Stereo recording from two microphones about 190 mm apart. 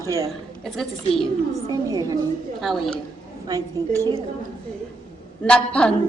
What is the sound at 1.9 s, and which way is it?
Speech, 20° right (ahead or behind).